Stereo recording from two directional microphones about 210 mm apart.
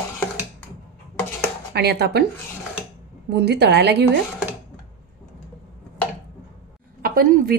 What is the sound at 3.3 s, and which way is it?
Speech, 50° right (ahead or behind).